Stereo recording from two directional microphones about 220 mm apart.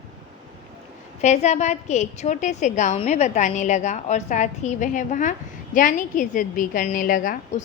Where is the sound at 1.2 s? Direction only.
30° left (ahead or behind).